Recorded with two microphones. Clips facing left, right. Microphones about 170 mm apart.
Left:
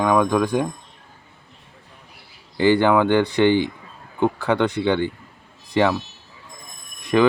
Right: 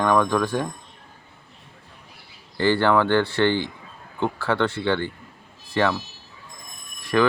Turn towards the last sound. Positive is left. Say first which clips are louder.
# left 4 dB
turn(degrees=20)  # may be behind; listen again after turning